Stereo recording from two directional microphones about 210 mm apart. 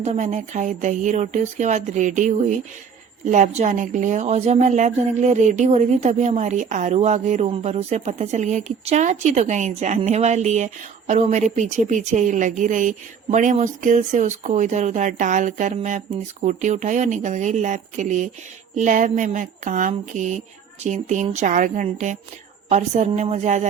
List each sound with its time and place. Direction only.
0.0 s a woman's voice: 35° right (ahead or behind)